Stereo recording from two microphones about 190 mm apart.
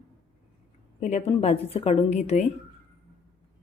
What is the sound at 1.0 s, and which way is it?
A woman's voice, 35° left (ahead or behind).